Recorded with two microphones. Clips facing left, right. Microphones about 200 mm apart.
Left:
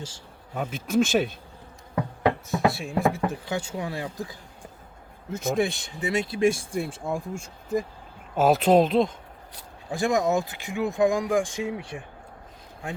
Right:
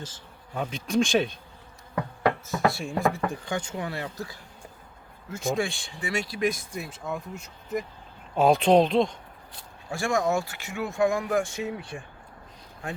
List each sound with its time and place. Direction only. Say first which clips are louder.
0.5 s speech: left 2 dB; 5° left (ahead or behind)
2.0 s a sound: left 2 dB; 15° left (ahead or behind)
2.6 s speech: left 1 dB; centre (ahead or behind); by 7.9 s 30° left (ahead or behind)
8.4 s speech: even; 5° left (ahead or behind)
9.9 s speech: left 2 dB; 20° left (ahead or behind)